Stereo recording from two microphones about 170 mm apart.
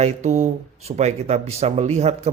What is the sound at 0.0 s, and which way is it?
Speech, 40° right (ahead or behind).